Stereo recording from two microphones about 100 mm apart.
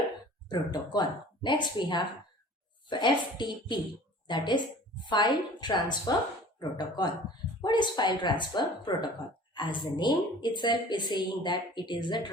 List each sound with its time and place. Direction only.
0.4 s a woman's voice: 45° left (ahead or behind)